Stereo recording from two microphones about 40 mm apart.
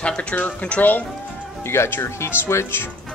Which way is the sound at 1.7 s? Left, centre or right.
Left.